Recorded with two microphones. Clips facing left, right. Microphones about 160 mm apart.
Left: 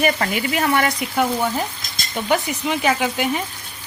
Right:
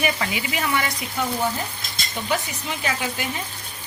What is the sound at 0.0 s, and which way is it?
Speech, 50° left (ahead or behind).